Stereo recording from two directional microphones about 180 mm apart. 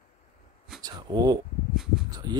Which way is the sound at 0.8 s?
20° right (ahead or behind).